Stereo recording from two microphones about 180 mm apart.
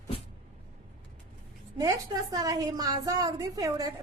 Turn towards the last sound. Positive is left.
turn(degrees=-20)  # may be behind; listen again after turning